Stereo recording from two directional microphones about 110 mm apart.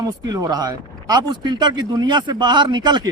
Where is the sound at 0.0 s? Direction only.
35° right (ahead or behind).